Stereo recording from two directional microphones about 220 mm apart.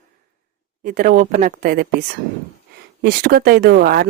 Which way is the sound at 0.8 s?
40° right (ahead or behind).